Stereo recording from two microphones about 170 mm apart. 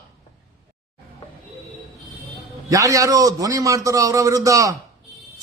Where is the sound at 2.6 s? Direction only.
20° right (ahead or behind).